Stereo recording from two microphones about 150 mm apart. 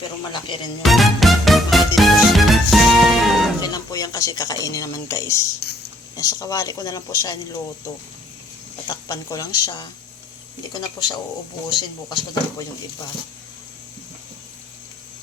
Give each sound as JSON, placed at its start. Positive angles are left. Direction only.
{"t": 0.3, "sound": "speech", "side_deg": 30}
{"t": 0.8, "sound": "music", "side_deg": 0}
{"t": 3.6, "sound": "speech", "side_deg": 30}
{"t": 8.9, "sound": "speech", "side_deg": 25}